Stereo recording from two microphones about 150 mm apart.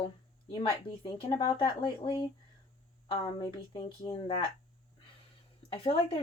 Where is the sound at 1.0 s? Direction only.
35° left (ahead or behind).